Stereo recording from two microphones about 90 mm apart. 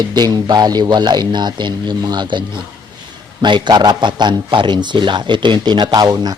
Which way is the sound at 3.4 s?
55° right (ahead or behind).